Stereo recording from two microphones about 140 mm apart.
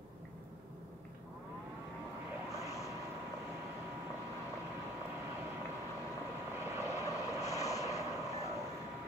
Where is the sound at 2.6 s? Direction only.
20° left (ahead or behind).